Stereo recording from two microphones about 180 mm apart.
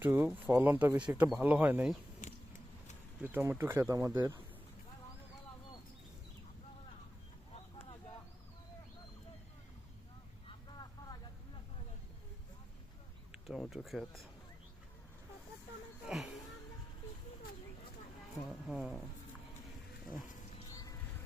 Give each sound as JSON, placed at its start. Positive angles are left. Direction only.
{"t": 0.0, "sound": "speech", "side_deg": -10}
{"t": 2.2, "sound": "a sound", "side_deg": 45}
{"t": 3.2, "sound": "speech", "side_deg": -10}
{"t": 10.7, "sound": "vehicle", "side_deg": 25}
{"t": 13.3, "sound": "speech", "side_deg": 0}
{"t": 16.0, "sound": "a sound", "side_deg": -5}
{"t": 18.7, "sound": "speech", "side_deg": -5}